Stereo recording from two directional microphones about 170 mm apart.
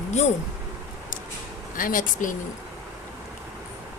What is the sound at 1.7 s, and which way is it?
Speech, 55° left (ahead or behind).